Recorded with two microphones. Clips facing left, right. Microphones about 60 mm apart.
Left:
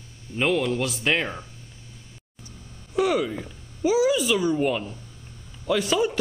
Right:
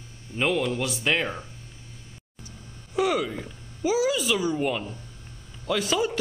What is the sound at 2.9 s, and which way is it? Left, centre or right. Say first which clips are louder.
Speech: left 2 dB; centre.